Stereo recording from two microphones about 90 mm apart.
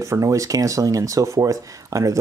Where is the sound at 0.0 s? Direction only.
35° right (ahead or behind).